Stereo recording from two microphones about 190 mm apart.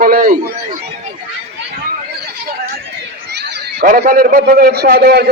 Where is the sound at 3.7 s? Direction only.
50° right (ahead or behind).